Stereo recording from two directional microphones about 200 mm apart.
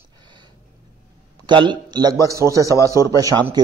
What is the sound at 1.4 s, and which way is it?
Speech, 20° right (ahead or behind).